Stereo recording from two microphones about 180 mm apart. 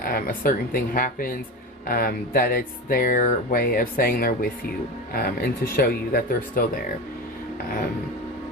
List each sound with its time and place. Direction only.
0.0 s speech: 55° left (ahead or behind)